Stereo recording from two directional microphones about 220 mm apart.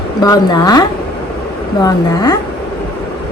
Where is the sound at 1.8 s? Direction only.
15° left (ahead or behind).